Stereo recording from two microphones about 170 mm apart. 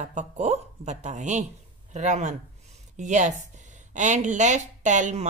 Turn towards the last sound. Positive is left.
turn(degrees=-45)  # may be behind; listen again after turning